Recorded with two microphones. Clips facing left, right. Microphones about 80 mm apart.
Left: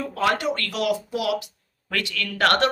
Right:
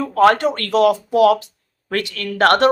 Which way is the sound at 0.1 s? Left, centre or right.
Right.